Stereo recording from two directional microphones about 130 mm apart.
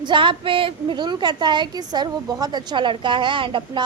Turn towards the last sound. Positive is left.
turn(degrees=-40)  # may be behind; listen again after turning